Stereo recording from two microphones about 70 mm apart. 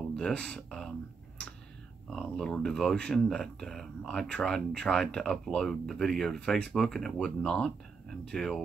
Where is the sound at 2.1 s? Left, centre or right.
Centre.